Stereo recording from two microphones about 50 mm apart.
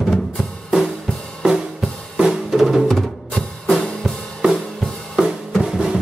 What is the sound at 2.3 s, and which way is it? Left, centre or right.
Music, centre.